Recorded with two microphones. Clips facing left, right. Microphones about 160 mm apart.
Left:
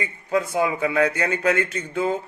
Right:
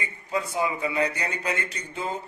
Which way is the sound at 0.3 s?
65° left (ahead or behind).